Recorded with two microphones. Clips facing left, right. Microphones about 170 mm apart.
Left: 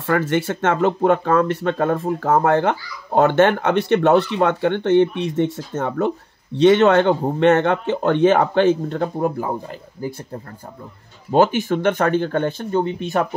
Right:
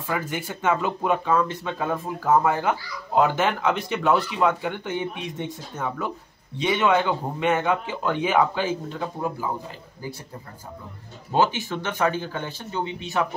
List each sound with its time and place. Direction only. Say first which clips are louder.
0.0 s speech: left 9 dB; 75° left (ahead or behind); by 9.5 s 60° left (ahead or behind)
11.3 s speech: left 7 dB; 50° left (ahead or behind)